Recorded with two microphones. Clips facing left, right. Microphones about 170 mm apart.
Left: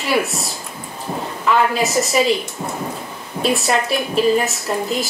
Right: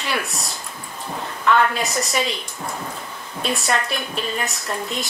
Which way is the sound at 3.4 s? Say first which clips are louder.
Left 5 dB; centre (ahead or behind).